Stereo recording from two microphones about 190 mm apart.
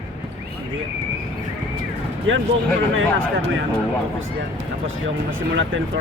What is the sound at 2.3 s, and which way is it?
Speech, 90° right.